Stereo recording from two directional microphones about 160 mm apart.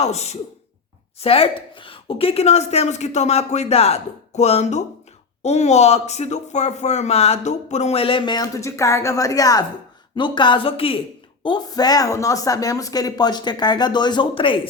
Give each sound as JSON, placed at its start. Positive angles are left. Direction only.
{"t": 0.0, "sound": "speech", "side_deg": 40}